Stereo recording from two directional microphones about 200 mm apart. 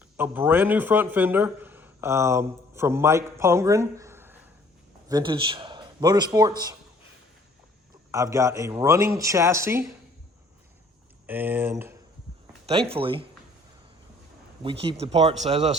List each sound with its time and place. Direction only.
0.2 s a man's voice: 10° right (ahead or behind)
5.0 s a man's voice: 20° right (ahead or behind)
8.1 s a man's voice: 15° right (ahead or behind)
11.3 s a man's voice: 10° right (ahead or behind)
12.6 s speech: 30° right (ahead or behind)
14.6 s speech: 25° right (ahead or behind)